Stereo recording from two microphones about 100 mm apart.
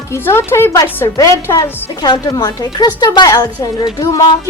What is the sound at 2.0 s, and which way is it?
A woman's voice, 40° left (ahead or behind).